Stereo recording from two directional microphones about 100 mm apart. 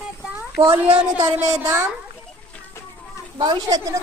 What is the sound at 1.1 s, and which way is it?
Speech, 35° right (ahead or behind).